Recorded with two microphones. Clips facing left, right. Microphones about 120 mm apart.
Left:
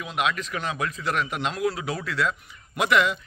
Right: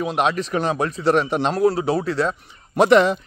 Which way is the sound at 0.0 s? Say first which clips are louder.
Right 6 dB; 35° right (ahead or behind).